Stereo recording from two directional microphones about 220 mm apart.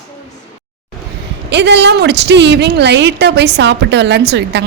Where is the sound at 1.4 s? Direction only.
50° right (ahead or behind).